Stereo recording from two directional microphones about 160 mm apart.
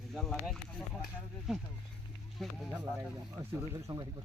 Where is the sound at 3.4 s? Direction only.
15° right (ahead or behind).